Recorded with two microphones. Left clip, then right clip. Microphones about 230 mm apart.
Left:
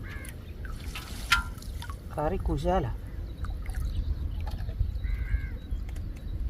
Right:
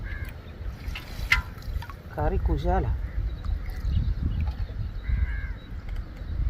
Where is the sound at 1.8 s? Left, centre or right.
Centre.